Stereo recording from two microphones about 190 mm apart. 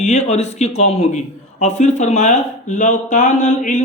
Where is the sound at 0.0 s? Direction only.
35° left (ahead or behind).